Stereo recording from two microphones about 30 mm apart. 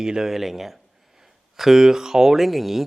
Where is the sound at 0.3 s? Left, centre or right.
Centre.